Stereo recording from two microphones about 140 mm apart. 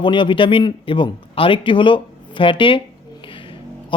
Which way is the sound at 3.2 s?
35° left (ahead or behind).